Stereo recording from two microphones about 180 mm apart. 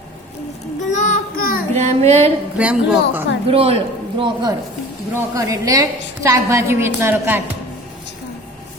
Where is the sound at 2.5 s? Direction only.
5° right (ahead or behind).